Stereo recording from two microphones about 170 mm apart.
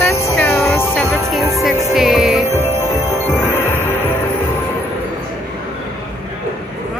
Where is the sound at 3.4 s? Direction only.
15° left (ahead or behind).